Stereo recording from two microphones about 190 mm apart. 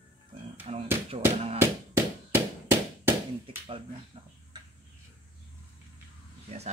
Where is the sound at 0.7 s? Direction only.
35° right (ahead or behind).